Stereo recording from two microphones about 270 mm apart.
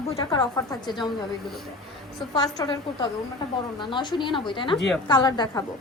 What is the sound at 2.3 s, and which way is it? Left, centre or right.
A woman's voice, centre.